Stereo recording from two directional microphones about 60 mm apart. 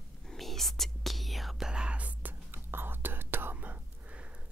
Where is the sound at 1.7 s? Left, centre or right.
Centre.